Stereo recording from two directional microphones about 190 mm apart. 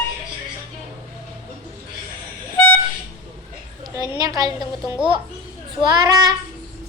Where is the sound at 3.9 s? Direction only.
20° right (ahead or behind).